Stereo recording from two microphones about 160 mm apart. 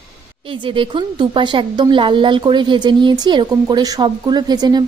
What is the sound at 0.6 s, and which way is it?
A woman's voice, 30° right (ahead or behind).